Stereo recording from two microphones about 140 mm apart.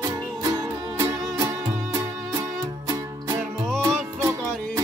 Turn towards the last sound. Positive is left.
turn(degrees=-20)  # may be behind; listen again after turning